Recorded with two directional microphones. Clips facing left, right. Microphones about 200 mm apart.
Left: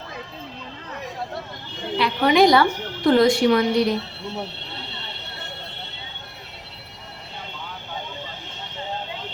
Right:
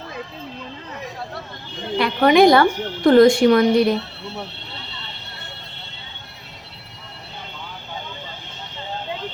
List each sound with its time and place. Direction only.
2.0 s a woman's voice: 55° right (ahead or behind)